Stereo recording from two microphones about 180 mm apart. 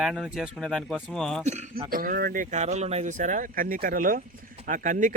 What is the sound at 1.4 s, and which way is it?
Speech, 40° right (ahead or behind).